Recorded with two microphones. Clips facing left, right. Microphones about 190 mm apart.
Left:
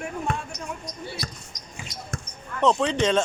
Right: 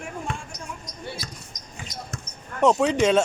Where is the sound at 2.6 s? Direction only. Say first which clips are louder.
Right 2 dB; 10° right (ahead or behind).